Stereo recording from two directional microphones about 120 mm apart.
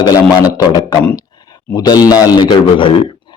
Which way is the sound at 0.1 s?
30° left (ahead or behind).